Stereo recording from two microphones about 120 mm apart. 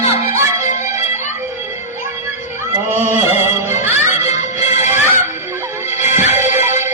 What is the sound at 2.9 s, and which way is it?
Music, 20° right (ahead or behind).